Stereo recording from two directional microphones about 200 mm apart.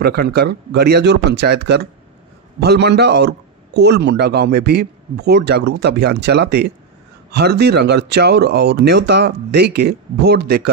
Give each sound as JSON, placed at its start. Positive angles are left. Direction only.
{"t": 0.0, "sound": "a man's voice", "side_deg": -50}